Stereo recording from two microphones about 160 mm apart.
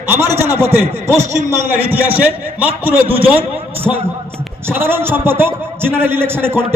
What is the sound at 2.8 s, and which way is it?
Speech, 10° right (ahead or behind).